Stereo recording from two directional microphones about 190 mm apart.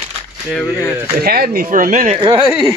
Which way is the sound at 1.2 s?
55° right (ahead or behind).